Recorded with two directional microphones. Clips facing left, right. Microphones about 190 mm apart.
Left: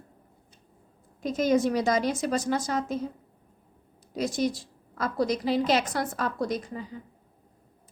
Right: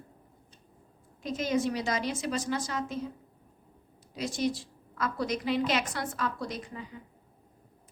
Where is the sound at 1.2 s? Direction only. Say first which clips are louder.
Left 5 dB; 45° left (ahead or behind).